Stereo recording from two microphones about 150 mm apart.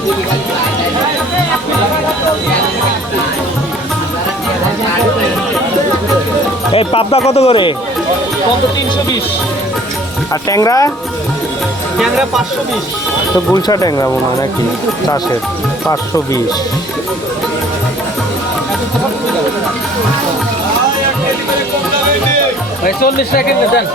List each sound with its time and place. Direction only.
6.7 s speech: 40° left (ahead or behind)
10.5 s speech: 20° left (ahead or behind)
11.9 s speech: 5° right (ahead or behind)
13.5 s speech: 25° left (ahead or behind)
15.9 s speech: 20° left (ahead or behind)
22.8 s speech: 80° left